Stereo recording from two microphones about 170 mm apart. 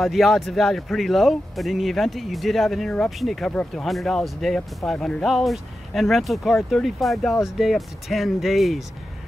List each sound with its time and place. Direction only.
0.0 s a man's voice: centre (ahead or behind)